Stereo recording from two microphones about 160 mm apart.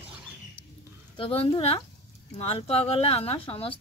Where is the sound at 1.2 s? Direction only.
35° left (ahead or behind).